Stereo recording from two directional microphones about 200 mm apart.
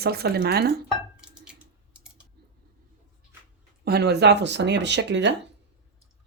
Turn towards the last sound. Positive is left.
turn(degrees=-60)  # may be behind; listen again after turning